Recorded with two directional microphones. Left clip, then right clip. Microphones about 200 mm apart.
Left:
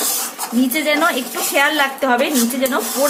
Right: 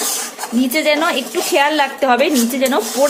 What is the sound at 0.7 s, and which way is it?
A woman's voice, 30° right (ahead or behind).